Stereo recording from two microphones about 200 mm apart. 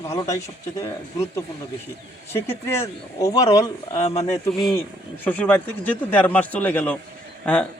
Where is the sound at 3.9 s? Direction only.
30° left (ahead or behind).